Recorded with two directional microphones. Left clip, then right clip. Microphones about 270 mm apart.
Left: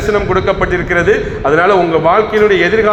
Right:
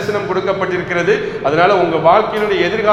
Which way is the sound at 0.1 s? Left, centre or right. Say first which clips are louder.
Left 5 dB; left.